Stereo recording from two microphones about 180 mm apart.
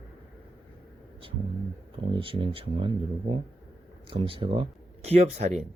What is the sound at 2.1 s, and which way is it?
Speech, 30° right (ahead or behind).